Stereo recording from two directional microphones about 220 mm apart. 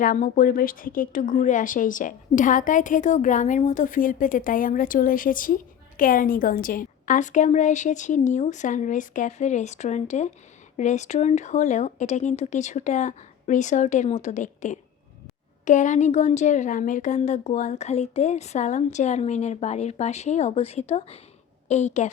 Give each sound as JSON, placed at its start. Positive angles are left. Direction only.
{"t": 0.0, "sound": "a woman's voice", "side_deg": 40}